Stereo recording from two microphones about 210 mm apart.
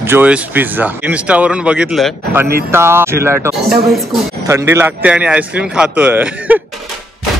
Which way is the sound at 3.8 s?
Centre (ahead or behind).